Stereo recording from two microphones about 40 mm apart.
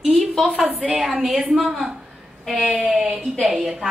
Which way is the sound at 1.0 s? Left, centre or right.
Centre.